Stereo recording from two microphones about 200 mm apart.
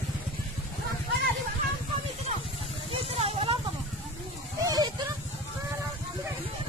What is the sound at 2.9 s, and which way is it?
Vehicle, 30° right (ahead or behind).